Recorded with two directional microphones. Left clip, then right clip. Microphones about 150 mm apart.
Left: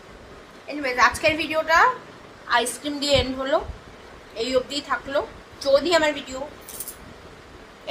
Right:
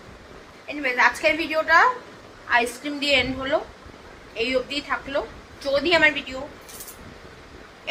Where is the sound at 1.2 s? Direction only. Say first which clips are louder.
Even; 10° right (ahead or behind).